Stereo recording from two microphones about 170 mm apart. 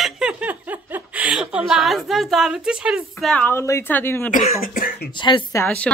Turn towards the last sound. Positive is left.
turn(degrees=10)  # may be behind; listen again after turning